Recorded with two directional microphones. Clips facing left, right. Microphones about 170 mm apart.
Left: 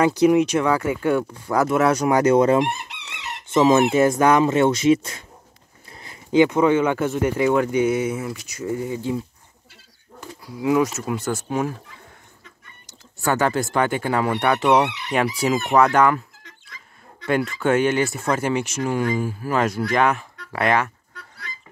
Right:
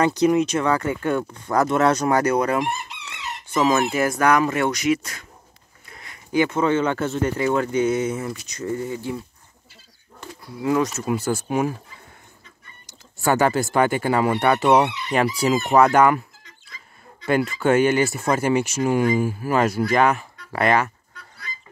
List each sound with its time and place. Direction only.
0.0 s speech: 10° left (ahead or behind); by 5.2 s 25° left (ahead or behind)
5.9 s a sound: 30° left (ahead or behind)
6.3 s speech: 15° left (ahead or behind)
10.4 s speech: 10° left (ahead or behind)
11.1 s speech: 10° right (ahead or behind)
12.8 s speech: 10° right (ahead or behind)
16.4 s a sound: 70° left (ahead or behind)
17.3 s speech: 5° right (ahead or behind)
21.1 s goose: 75° left (ahead or behind)